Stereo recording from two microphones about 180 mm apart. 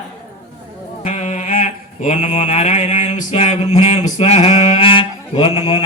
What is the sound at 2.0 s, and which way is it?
Mantra, 40° left (ahead or behind).